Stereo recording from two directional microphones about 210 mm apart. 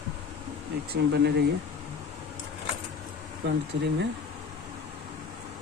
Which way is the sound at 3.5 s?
55° right (ahead or behind).